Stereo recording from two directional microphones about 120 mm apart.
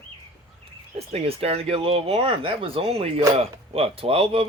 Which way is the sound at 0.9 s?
55° right (ahead or behind).